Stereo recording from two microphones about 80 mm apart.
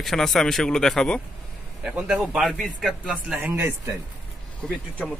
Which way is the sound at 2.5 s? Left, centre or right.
Centre.